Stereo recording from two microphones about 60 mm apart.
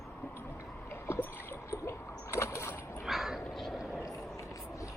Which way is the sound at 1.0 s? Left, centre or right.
Left.